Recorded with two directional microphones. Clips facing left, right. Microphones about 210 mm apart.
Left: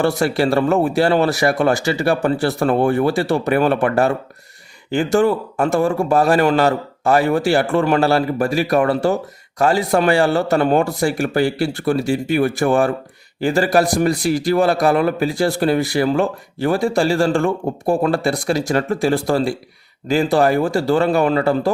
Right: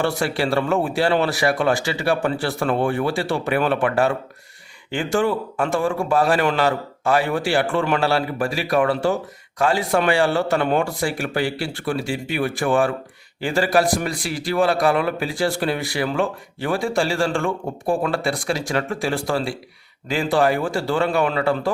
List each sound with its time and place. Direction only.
0.0 s a man's voice: 40° left (ahead or behind)